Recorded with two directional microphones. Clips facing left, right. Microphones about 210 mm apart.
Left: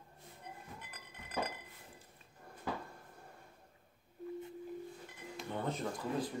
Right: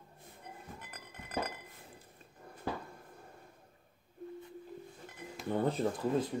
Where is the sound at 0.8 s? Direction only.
45° right (ahead or behind).